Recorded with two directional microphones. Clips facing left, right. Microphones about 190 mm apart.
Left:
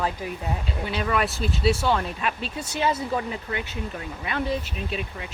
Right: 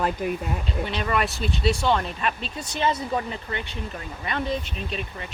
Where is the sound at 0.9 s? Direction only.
5° left (ahead or behind).